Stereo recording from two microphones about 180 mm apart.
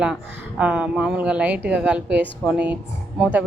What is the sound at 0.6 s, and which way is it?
A woman's voice, 5° right (ahead or behind).